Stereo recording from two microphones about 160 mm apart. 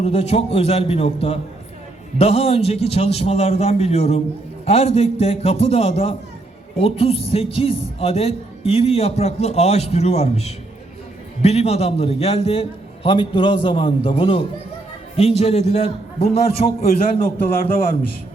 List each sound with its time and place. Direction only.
0.0 s a man's voice: 40° left (ahead or behind); by 17.7 s 60° left (ahead or behind)